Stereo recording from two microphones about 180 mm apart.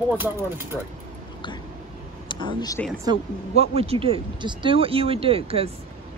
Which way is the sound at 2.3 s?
25° left (ahead or behind).